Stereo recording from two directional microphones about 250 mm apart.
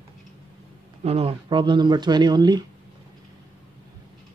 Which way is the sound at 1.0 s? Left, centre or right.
Right.